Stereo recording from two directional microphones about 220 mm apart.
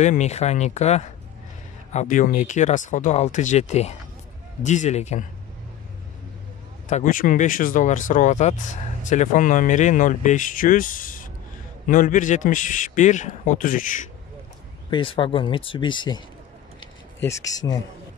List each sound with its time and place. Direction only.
0.0 s speech: 30° left (ahead or behind)
6.9 s speech: 35° left (ahead or behind)
14.9 s speech: 20° left (ahead or behind)
17.2 s speech: 15° left (ahead or behind)